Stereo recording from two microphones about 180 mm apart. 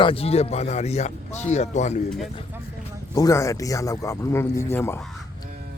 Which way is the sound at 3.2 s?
15° left (ahead or behind).